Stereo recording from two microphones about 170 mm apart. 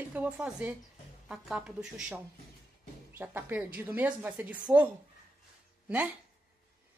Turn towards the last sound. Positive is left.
turn(degrees=-10)  # may be behind; listen again after turning